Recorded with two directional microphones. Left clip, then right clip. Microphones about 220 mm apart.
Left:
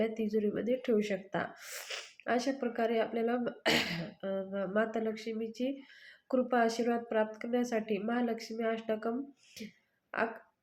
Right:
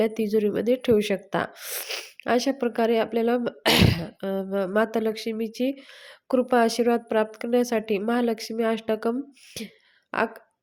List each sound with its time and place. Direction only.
0.0 s a woman's voice: 45° right (ahead or behind)